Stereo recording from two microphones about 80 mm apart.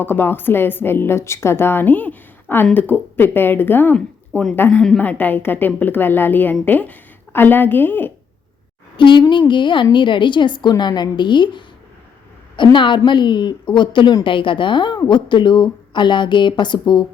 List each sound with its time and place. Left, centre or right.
0.0 s a woman's voice: left
4.7 s a woman's voice: centre
4.9 s a woman's voice: left
9.0 s a woman's voice: left
14.3 s a woman's voice: left
15.0 s speech: left